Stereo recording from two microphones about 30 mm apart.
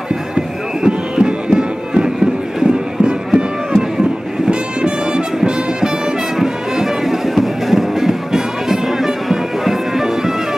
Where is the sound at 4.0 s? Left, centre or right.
Right.